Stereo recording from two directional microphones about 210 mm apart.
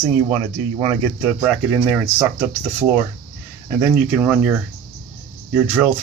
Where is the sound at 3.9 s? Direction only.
5° right (ahead or behind).